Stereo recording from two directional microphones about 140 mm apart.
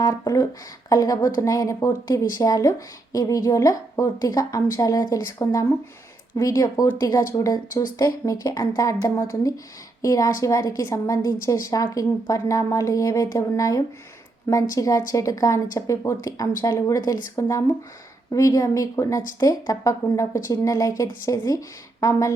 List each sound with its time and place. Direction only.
0.0 s a woman's voice: 25° left (ahead or behind)